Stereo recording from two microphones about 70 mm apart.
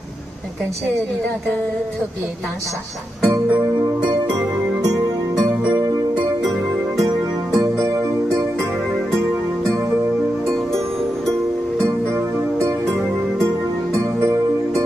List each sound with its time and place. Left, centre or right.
7.5 s music: right
12.5 s music: right
13.9 s music: right